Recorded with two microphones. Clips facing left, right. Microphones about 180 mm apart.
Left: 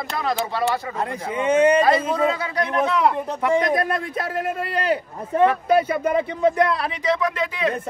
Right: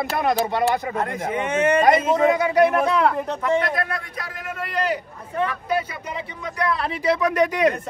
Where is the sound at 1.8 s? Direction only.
20° right (ahead or behind).